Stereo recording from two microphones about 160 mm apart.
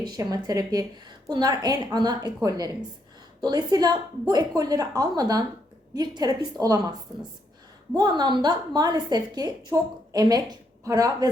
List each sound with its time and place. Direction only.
0.0 s a woman's voice: 25° right (ahead or behind)
7.9 s a woman's voice: 25° right (ahead or behind)